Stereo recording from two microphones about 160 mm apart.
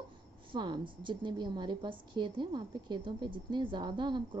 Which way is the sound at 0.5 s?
30° right (ahead or behind).